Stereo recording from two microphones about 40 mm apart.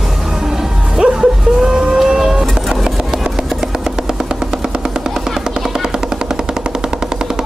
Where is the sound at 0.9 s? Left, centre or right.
Centre.